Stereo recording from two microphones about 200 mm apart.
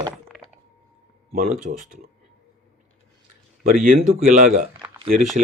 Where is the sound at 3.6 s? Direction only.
45° right (ahead or behind).